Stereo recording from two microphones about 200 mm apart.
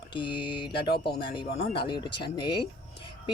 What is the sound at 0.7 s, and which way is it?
Speech, 55° left (ahead or behind).